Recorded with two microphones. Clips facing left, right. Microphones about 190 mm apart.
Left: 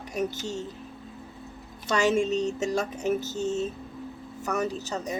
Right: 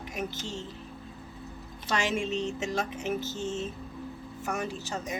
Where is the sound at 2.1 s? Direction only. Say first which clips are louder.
Left 5 dB; 40° left (ahead or behind).